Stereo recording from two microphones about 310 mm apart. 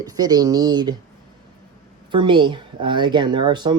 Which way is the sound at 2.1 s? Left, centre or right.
Centre.